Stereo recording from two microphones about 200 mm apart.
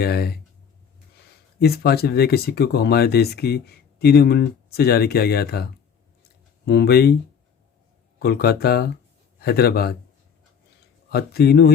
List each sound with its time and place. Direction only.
0.0 s speech: 50° left (ahead or behind)
1.5 s speech: 50° left (ahead or behind)
6.7 s speech: 55° left (ahead or behind)
8.2 s speech: 50° left (ahead or behind)
11.1 s speech: 50° left (ahead or behind)